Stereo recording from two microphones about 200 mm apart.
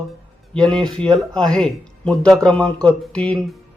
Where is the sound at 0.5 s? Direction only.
5° left (ahead or behind).